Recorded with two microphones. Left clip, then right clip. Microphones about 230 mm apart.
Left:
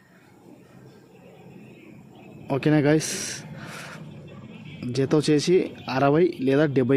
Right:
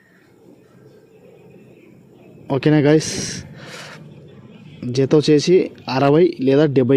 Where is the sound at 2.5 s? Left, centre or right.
Centre.